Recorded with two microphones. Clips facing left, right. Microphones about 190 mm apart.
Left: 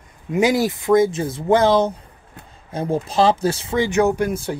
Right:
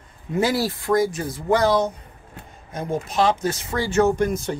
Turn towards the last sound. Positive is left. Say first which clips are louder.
# left 1 dB
turn(degrees=10)  # may be behind; listen again after turning